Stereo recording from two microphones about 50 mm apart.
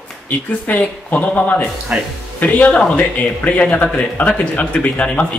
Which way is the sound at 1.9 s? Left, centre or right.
Right.